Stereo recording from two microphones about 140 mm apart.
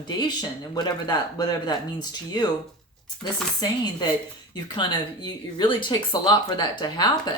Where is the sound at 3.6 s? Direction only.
30° left (ahead or behind).